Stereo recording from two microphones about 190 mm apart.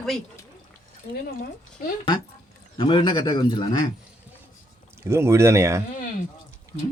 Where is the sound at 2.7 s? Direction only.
25° left (ahead or behind).